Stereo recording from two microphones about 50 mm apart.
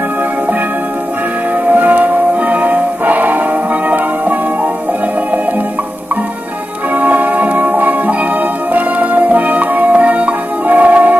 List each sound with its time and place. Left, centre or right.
1.7 s music: right
7.0 s music: right